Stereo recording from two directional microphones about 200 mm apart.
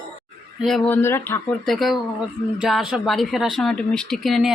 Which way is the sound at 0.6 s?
5° left (ahead or behind).